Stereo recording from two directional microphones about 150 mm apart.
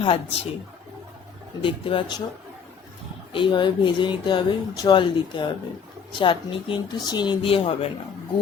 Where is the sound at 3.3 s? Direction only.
35° left (ahead or behind).